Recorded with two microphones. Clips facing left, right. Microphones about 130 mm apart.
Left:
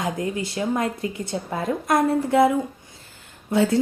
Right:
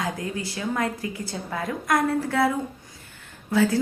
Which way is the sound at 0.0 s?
20° left (ahead or behind).